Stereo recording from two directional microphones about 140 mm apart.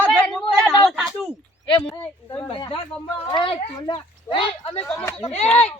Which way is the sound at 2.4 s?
35° left (ahead or behind).